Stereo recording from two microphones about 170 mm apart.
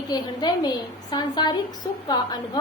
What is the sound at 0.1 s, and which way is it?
A woman's voice, 25° left (ahead or behind).